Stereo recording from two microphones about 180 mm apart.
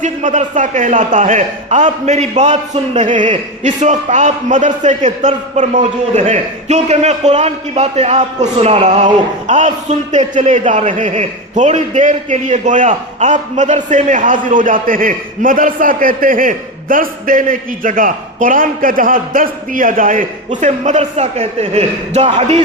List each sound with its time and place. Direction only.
0.0 s a man's voice: 40° right (ahead or behind)